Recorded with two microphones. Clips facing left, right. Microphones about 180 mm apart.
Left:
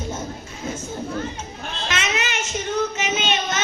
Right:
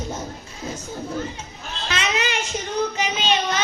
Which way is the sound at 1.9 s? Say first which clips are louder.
Right 2 dB; 35° right (ahead or behind).